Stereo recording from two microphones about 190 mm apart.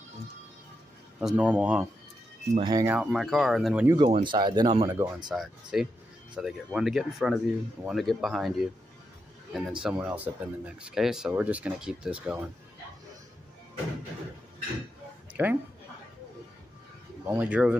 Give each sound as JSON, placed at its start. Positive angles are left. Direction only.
{"t": 1.2, "sound": "speech", "side_deg": -5}
{"t": 3.0, "sound": "speech", "side_deg": 0}
{"t": 3.8, "sound": "speech", "side_deg": -20}
{"t": 5.3, "sound": "speech", "side_deg": 0}
{"t": 15.4, "sound": "speech", "side_deg": -10}
{"t": 17.2, "sound": "speech", "side_deg": -10}